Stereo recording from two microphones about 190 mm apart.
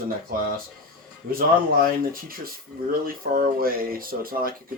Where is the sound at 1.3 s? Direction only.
50° right (ahead or behind).